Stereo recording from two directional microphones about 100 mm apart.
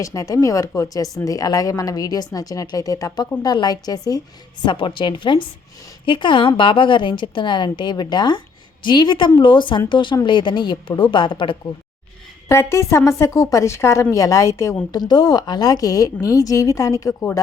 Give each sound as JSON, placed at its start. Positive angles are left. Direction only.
{"t": 0.0, "sound": "a woman's voice", "side_deg": 35}
{"t": 4.6, "sound": "a woman's voice", "side_deg": 55}
{"t": 12.5, "sound": "a woman's voice", "side_deg": 30}
{"t": 14.9, "sound": "a woman's voice", "side_deg": 45}